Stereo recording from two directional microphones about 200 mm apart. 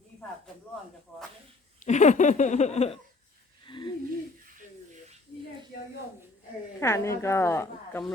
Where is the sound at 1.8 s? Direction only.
35° left (ahead or behind).